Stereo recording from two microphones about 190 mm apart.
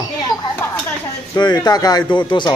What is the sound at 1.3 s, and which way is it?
Speech, 20° left (ahead or behind).